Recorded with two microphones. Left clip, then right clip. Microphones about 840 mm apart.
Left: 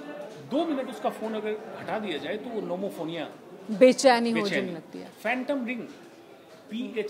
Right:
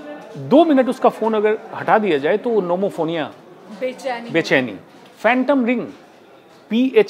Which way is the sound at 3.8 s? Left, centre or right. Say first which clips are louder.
Left 6 dB; left.